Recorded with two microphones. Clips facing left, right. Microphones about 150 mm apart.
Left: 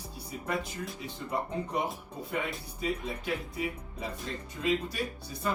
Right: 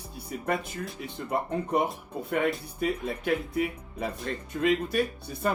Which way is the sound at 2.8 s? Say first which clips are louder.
Right 5 dB; 60° right (ahead or behind).